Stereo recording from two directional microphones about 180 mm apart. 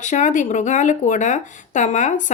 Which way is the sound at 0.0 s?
45° left (ahead or behind).